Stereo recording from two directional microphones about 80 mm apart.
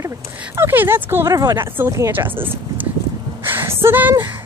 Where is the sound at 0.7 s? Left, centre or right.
Right.